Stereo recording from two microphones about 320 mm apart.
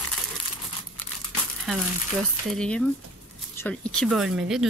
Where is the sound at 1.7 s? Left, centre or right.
Centre.